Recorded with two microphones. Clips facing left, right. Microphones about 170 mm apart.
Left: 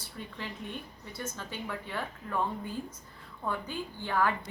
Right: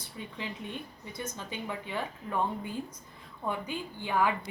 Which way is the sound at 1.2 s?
15° right (ahead or behind).